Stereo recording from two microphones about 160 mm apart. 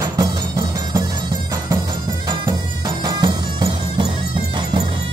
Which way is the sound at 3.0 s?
30° right (ahead or behind).